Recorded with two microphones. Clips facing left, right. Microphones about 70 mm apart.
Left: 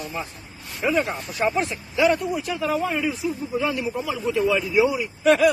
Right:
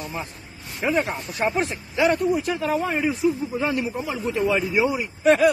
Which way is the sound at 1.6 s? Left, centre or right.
Right.